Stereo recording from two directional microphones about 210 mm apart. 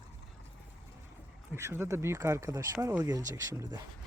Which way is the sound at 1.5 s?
10° right (ahead or behind).